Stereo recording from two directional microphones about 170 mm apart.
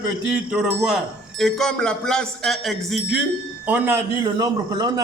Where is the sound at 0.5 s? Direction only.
5° right (ahead or behind).